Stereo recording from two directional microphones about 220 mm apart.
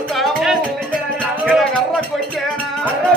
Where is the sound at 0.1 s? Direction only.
Centre (ahead or behind).